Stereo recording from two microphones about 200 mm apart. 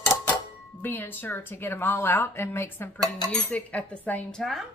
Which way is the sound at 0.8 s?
10° left (ahead or behind).